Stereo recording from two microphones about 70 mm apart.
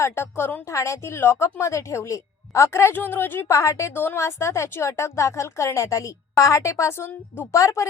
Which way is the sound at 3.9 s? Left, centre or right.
Left.